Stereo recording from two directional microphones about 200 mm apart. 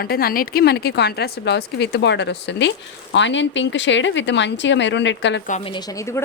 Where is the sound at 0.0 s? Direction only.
50° left (ahead or behind).